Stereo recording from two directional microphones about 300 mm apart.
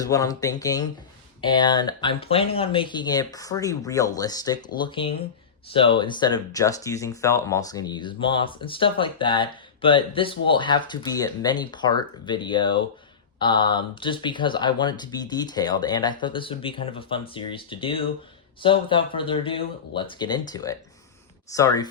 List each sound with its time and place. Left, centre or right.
0.0 s speech: centre